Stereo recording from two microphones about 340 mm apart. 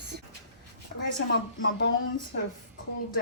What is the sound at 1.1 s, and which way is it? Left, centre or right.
Speech, left.